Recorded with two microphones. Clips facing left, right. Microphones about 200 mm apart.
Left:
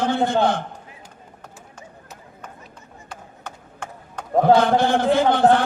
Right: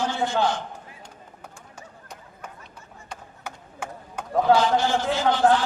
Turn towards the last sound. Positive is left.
turn(degrees=55)  # may be behind; listen again after turning